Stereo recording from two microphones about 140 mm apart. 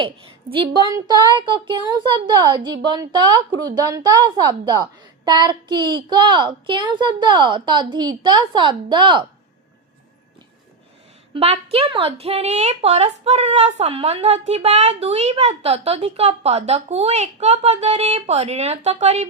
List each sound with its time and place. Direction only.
0.0 s speech: 40° right (ahead or behind)
0.9 s speech: 25° right (ahead or behind)
11.3 s a woman's voice: 45° right (ahead or behind)